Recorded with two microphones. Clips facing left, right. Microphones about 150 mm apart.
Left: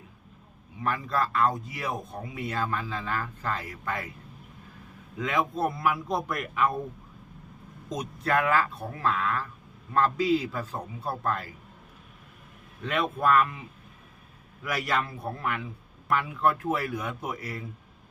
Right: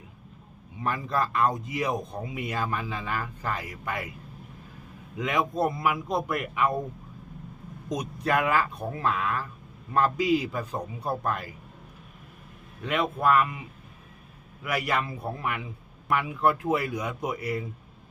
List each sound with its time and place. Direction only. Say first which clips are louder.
0.8 s speech: even; 20° right (ahead or behind)
5.1 s speech: right 1 dB; 15° right (ahead or behind)
7.9 s speech: right 1 dB; 15° right (ahead or behind)
12.8 s speech: right 1 dB; 10° right (ahead or behind)
14.6 s speech: right 1 dB; 10° right (ahead or behind)